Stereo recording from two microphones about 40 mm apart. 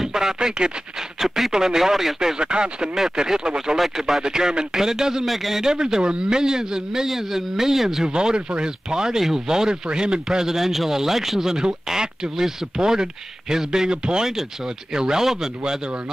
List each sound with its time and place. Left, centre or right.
0.0 s speech: centre
1.2 s a man's voice: centre
2.1 s a man's voice: centre
3.7 s a man's voice: centre
4.0 s a man's voice: centre
5.2 s a man's voice: centre
5.6 s a man's voice: centre
8.1 s a man's voice: right
10.5 s a man's voice: centre